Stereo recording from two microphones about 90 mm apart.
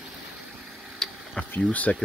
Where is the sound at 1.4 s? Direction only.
15° left (ahead or behind).